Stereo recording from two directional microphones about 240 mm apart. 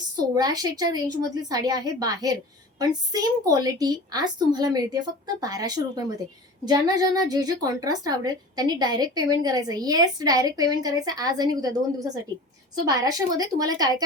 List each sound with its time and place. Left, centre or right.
0.2 s a woman's voice: centre